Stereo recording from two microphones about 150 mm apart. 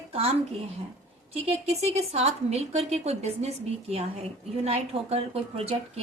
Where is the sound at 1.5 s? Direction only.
45° right (ahead or behind).